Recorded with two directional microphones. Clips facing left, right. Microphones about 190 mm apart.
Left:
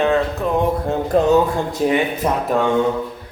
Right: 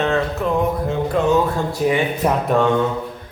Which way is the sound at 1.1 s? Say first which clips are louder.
Left 4 dB; 40° left (ahead or behind).